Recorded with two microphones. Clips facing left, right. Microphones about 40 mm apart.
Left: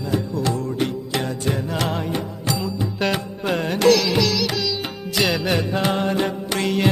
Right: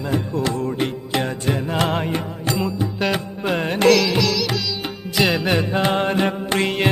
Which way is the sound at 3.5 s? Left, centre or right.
Right.